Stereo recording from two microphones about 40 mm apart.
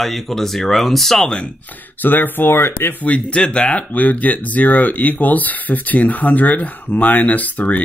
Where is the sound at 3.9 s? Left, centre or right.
Left.